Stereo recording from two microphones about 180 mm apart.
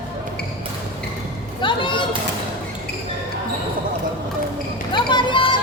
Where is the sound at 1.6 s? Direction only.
25° left (ahead or behind).